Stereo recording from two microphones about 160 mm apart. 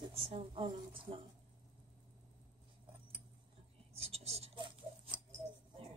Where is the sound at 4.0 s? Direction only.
40° right (ahead or behind).